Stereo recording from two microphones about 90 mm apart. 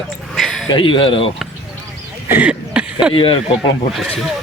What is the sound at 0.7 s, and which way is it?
Speech, 70° left (ahead or behind).